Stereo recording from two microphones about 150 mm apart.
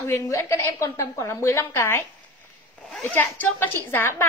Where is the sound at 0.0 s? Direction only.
15° left (ahead or behind).